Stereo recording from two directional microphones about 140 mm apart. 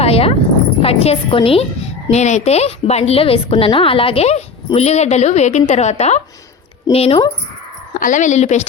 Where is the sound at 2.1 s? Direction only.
55° left (ahead or behind).